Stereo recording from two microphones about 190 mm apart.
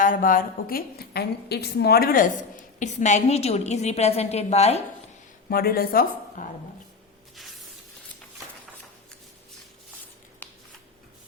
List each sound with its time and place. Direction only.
0.0 s a woman's voice: 45° left (ahead or behind)
5.5 s a woman's voice: 50° left (ahead or behind)
10.4 s scissors: 10° left (ahead or behind)